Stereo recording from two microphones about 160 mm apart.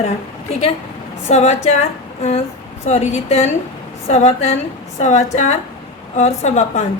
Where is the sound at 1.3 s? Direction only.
45° left (ahead or behind).